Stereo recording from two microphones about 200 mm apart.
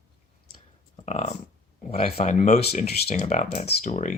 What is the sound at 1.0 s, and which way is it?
Speech, 35° left (ahead or behind).